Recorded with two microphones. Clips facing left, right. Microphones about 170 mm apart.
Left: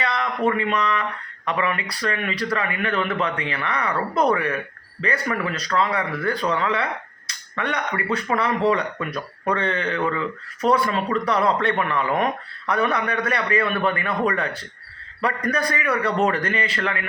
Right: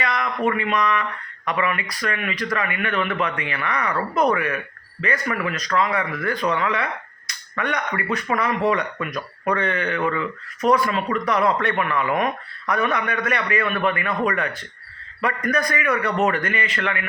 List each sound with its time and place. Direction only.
0.0 s a man's voice: 30° left (ahead or behind)
7.3 s finger snapping: 30° left (ahead or behind)
8.1 s a man's voice: 30° left (ahead or behind)